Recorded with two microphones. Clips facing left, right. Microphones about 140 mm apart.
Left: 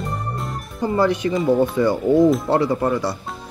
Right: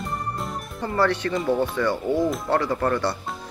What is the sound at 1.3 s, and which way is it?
Speech, 5° left (ahead or behind).